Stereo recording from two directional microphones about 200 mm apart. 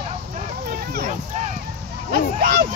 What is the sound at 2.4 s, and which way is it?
Speech, 50° right (ahead or behind).